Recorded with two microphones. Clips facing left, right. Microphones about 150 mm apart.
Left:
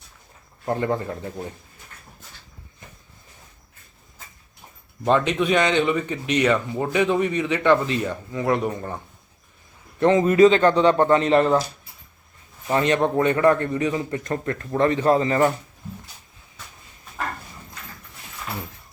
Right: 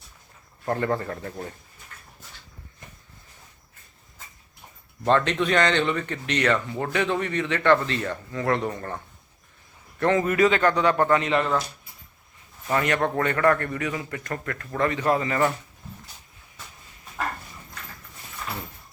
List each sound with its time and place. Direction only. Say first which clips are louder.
0.6 s speech: left 2 dB; 15° left (ahead or behind)
5.0 s speech: left 2 dB; 10° left (ahead or behind)
10.0 s a man's voice: left 6 dB; 20° left (ahead or behind)
11.2 s speech: left 6 dB; 35° left (ahead or behind)
12.6 s a man's voice: left 4 dB; 25° left (ahead or behind)